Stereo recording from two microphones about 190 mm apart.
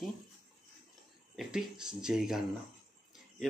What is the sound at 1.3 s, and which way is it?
Speech, 5° right (ahead or behind).